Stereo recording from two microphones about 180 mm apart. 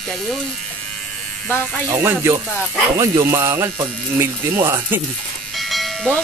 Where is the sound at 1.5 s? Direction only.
10° left (ahead or behind).